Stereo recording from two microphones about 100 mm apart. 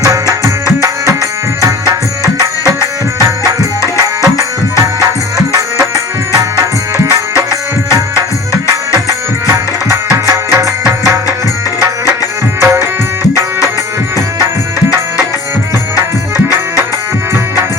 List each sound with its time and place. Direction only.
0.0 s music: 35° right (ahead or behind)
3.2 s music: 30° right (ahead or behind)
5.5 s music: 30° right (ahead or behind)
10.1 s music: 30° right (ahead or behind)
12.5 s music: 25° right (ahead or behind)